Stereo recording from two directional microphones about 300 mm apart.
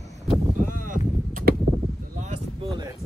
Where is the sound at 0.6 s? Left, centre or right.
Right.